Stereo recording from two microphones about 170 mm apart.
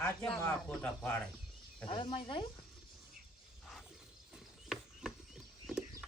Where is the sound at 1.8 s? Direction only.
30° left (ahead or behind).